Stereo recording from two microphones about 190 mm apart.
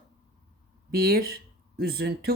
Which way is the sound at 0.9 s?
55° right (ahead or behind).